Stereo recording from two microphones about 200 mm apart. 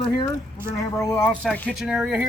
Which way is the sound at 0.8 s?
15° left (ahead or behind).